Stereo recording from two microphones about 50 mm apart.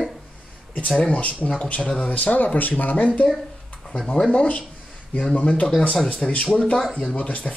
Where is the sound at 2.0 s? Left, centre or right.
Left.